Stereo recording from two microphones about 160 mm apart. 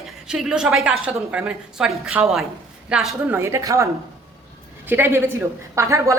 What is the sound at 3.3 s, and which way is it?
A woman's voice, 15° right (ahead or behind).